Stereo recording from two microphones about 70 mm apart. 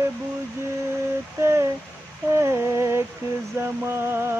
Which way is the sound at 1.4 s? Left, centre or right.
Right.